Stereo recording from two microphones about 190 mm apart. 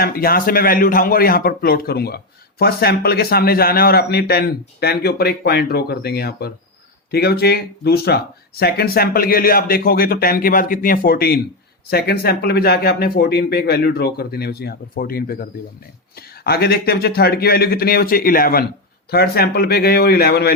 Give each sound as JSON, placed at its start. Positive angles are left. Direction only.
{"t": 0.0, "sound": "a man's voice", "side_deg": 50}